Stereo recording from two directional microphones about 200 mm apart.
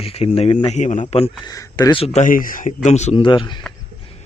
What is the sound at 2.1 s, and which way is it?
A man's voice, 40° left (ahead or behind).